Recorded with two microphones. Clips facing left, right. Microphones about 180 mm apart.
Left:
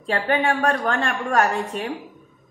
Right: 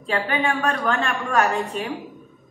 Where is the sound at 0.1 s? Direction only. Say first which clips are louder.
Left 2 dB; 50° left (ahead or behind).